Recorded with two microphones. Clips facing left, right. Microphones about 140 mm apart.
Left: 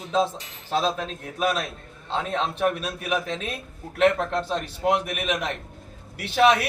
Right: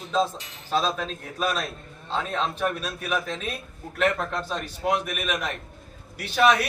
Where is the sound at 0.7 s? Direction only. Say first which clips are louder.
Left 1 dB; 20° left (ahead or behind).